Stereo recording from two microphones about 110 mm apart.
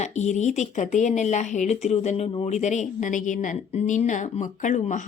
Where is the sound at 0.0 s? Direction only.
90° left.